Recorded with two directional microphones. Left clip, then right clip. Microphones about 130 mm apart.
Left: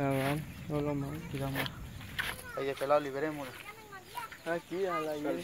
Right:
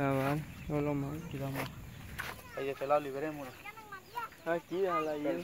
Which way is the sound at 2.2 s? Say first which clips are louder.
Left 5 dB; 15° right (ahead or behind).